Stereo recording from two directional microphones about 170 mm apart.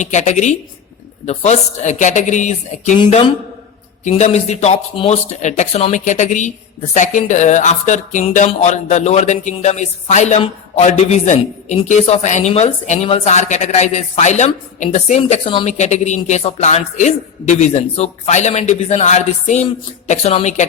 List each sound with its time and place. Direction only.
0.0 s speech: 45° left (ahead or behind)
4.0 s speech: 40° left (ahead or behind)